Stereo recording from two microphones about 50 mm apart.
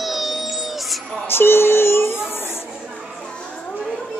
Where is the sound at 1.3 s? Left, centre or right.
Left.